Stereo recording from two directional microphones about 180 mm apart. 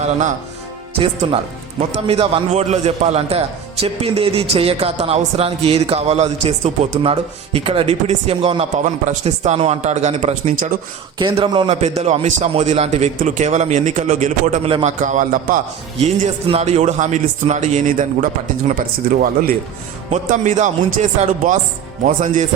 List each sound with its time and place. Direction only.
0.9 s a man's voice: 30° right (ahead or behind)
15.0 s speech: 45° right (ahead or behind)
16.2 s a man's voice: 35° right (ahead or behind)